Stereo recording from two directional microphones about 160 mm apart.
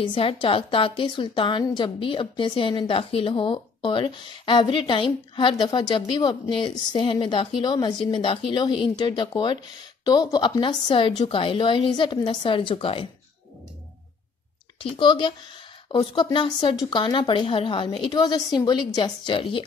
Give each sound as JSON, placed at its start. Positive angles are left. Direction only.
{"t": 0.0, "sound": "a woman's voice", "side_deg": 35}
{"t": 14.8, "sound": "a woman's voice", "side_deg": 30}